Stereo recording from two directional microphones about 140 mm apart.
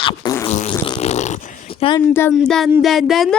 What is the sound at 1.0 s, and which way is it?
Dog, 55° left (ahead or behind).